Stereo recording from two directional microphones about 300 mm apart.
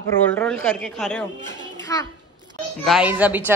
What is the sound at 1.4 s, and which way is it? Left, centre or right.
Music, centre.